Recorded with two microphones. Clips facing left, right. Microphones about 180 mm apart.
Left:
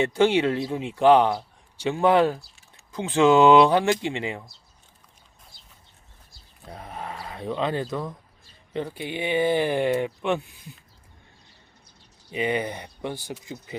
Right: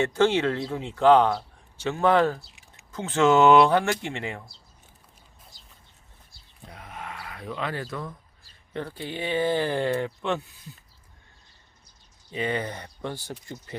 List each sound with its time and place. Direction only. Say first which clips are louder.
0.0 s speech: left 2 dB; 15° left (ahead or behind)
6.7 s a sound: left 4 dB; 35° left (ahead or behind)
8.7 s speech: left 3 dB; 15° left (ahead or behind)
12.3 s speech: left 3 dB; 15° left (ahead or behind)